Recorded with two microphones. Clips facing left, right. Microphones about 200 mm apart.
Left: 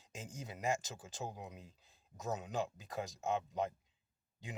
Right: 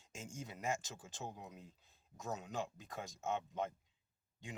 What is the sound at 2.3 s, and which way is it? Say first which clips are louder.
Speech: left 4 dB; 15° left (ahead or behind).